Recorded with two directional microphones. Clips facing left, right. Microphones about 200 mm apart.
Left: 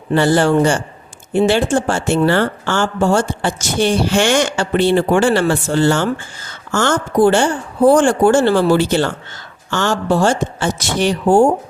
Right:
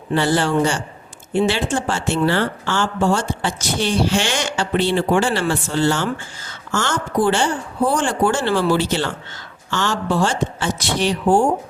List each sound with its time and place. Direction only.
0.1 s speech: 50° left (ahead or behind)